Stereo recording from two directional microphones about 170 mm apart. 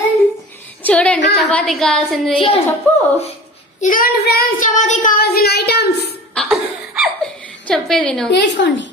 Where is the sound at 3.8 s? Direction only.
55° left (ahead or behind).